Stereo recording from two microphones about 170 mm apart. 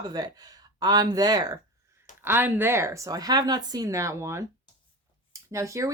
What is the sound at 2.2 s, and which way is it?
Speech, 10° right (ahead or behind).